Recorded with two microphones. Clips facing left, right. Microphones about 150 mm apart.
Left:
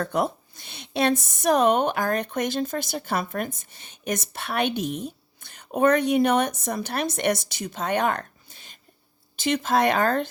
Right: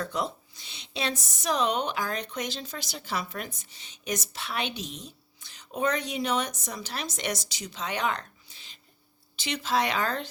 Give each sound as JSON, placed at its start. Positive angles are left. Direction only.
{"t": 0.0, "sound": "a woman's voice", "side_deg": 55}